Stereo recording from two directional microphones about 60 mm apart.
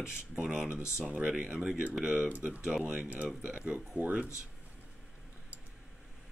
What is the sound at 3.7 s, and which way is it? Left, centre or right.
Speech, right.